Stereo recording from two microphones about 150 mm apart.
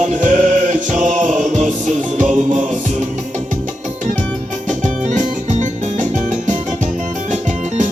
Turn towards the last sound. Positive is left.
turn(degrees=-55)  # may be behind; listen again after turning